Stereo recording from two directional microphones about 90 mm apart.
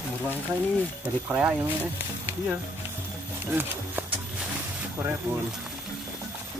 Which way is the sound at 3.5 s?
20° right (ahead or behind).